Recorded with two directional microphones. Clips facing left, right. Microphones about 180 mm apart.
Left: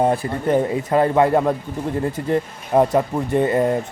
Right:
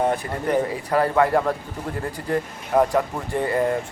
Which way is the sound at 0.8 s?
20° left (ahead or behind).